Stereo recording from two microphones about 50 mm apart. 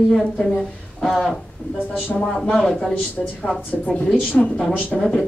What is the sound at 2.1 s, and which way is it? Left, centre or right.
Speech, centre.